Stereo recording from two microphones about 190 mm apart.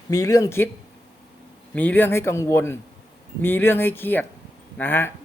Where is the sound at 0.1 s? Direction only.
15° left (ahead or behind).